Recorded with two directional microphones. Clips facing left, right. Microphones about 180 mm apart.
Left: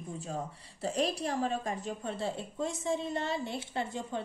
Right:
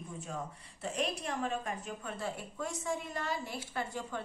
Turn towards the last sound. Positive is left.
turn(degrees=25)  # may be behind; listen again after turning